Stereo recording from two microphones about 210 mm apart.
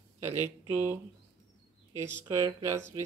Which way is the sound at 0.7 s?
10° right (ahead or behind).